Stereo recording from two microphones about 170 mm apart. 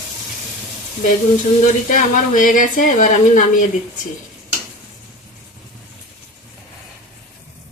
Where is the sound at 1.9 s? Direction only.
50° left (ahead or behind).